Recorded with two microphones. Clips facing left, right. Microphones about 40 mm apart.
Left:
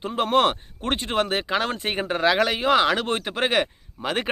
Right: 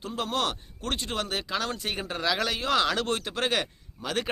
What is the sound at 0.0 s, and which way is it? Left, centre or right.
Speech, left.